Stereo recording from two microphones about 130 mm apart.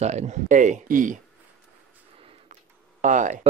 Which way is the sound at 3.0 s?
75° right (ahead or behind).